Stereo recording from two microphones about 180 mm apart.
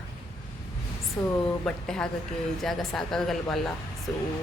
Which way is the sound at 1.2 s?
15° left (ahead or behind).